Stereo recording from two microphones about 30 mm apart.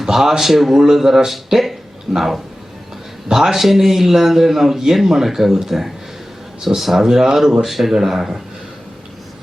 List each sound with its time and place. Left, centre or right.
0.0 s a man's voice: centre